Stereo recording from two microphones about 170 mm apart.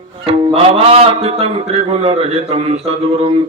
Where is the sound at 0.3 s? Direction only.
35° right (ahead or behind).